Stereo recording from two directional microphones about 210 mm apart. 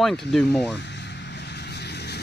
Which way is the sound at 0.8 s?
55° left (ahead or behind).